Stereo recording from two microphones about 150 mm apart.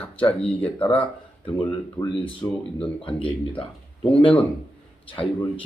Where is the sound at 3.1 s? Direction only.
35° left (ahead or behind).